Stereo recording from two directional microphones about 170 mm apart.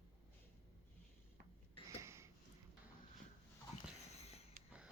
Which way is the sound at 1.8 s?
15° right (ahead or behind).